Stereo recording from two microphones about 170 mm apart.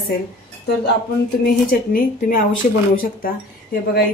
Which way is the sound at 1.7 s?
55° left (ahead or behind).